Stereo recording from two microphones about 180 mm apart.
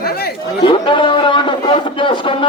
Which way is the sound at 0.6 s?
25° left (ahead or behind).